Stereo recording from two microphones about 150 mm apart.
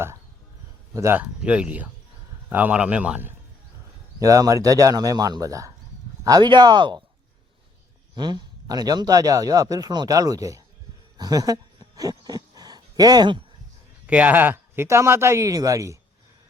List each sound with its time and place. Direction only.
0.9 s speech: 20° right (ahead or behind)
1.4 s speech: 10° right (ahead or behind)
4.2 s speech: 25° right (ahead or behind)
8.1 s speech: 30° right (ahead or behind)
11.2 s a sound: 25° right (ahead or behind)
14.1 s speech: 10° right (ahead or behind)